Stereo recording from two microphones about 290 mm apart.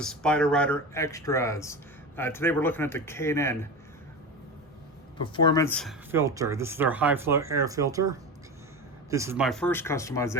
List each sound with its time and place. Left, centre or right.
0.0 s speech: centre
5.2 s speech: centre